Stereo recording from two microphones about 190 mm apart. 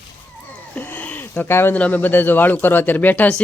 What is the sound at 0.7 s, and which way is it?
Speech, 10° left (ahead or behind).